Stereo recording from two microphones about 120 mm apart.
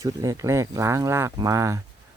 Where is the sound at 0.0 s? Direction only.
30° right (ahead or behind).